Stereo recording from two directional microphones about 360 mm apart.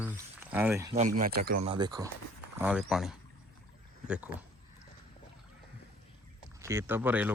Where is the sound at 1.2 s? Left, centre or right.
Right; by 4.3 s centre.